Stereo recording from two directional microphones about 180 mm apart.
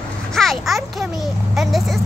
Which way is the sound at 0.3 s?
Centre (ahead or behind).